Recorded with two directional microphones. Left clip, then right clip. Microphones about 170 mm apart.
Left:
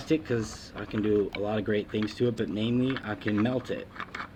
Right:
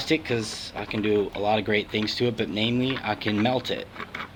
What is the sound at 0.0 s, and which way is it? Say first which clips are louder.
Speech: right 3 dB; 20° left (ahead or behind).